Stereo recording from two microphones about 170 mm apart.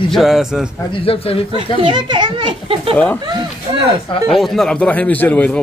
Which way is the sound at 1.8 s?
30° right (ahead or behind).